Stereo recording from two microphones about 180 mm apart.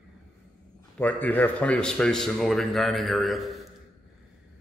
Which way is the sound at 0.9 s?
10° left (ahead or behind).